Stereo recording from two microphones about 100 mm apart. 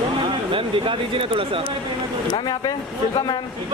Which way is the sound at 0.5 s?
60° right (ahead or behind).